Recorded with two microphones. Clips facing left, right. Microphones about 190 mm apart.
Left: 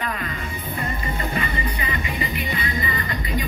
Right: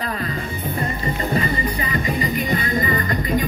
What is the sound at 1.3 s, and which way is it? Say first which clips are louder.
Music: right 5 dB; 35° right (ahead or behind).